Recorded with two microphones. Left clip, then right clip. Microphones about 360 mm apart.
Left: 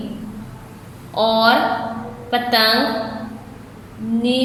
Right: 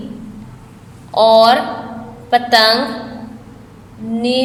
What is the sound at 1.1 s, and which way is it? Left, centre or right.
A woman's voice, centre.